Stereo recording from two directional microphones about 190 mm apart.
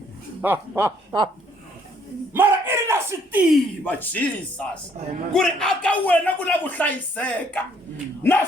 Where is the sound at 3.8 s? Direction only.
10° left (ahead or behind).